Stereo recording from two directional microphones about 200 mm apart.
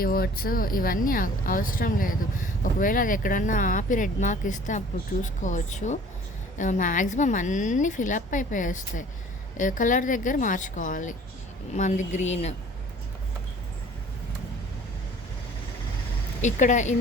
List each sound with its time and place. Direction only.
0.0 s a woman's voice: 50° left (ahead or behind)
16.4 s a woman's voice: 40° left (ahead or behind)